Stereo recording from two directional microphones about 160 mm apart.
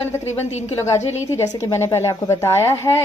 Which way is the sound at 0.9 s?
45° left (ahead or behind).